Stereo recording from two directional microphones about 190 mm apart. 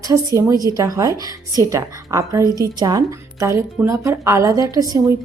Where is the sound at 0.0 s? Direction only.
15° right (ahead or behind).